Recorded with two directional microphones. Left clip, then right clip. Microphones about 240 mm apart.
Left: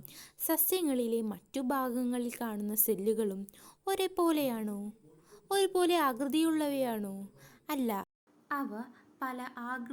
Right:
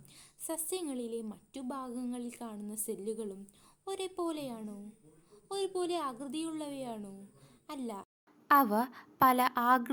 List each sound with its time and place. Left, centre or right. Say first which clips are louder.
0.1 s a woman's voice: left 7 dB; left
8.4 s a woman's voice: right 11 dB; right